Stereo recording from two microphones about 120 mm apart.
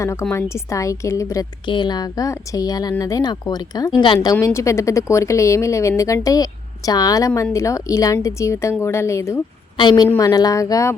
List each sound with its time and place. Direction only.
0.0 s a woman's voice: 25° left (ahead or behind)
1.6 s a woman's voice: 40° left (ahead or behind); by 9.4 s 25° left (ahead or behind)
9.7 s a woman's voice: 35° left (ahead or behind)